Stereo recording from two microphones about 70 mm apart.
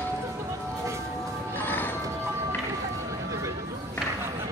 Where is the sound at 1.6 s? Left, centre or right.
Left.